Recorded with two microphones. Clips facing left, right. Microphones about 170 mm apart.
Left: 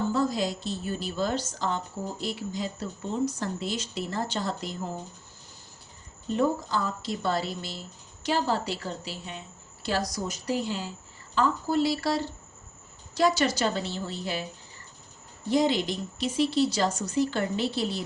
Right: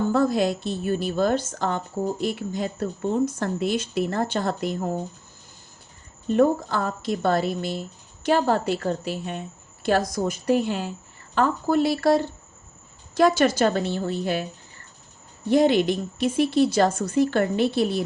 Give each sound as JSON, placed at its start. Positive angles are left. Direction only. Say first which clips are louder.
{"t": 0.1, "sound": "speech", "louder": "right 6 dB", "side_deg": -60}
{"t": 6.2, "sound": "speech", "louder": "right 7 dB", "side_deg": -55}
{"t": 15.4, "sound": "speech", "louder": "right 6 dB", "side_deg": -60}